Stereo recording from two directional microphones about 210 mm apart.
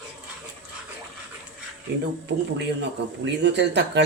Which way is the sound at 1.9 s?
50° right (ahead or behind).